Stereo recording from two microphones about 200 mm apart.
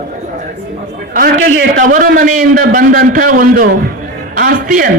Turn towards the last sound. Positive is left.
turn(degrees=-45)  # may be behind; listen again after turning